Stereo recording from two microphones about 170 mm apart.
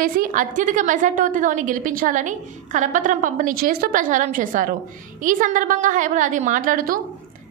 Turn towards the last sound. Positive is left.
turn(degrees=-55)  # may be behind; listen again after turning